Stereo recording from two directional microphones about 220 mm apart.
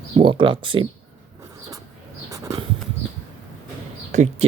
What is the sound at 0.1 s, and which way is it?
Speech, 25° right (ahead or behind).